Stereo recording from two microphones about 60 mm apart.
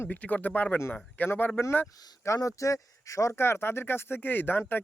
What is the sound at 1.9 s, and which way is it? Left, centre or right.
Speech, left.